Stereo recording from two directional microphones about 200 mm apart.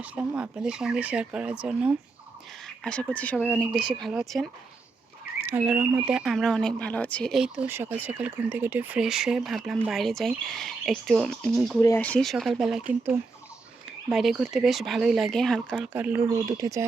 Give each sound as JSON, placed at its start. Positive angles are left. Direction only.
{"t": 0.0, "sound": "speech", "side_deg": -5}
{"t": 5.5, "sound": "speech", "side_deg": -10}
{"t": 11.8, "sound": "speech", "side_deg": 10}
{"t": 15.9, "sound": "speech", "side_deg": -10}